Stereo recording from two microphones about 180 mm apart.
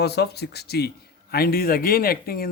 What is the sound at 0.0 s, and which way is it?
A man's voice, 65° left (ahead or behind).